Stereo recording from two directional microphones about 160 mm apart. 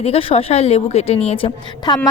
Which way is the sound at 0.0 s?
35° left (ahead or behind).